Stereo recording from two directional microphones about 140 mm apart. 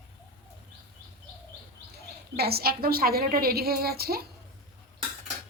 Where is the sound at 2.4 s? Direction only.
90° right.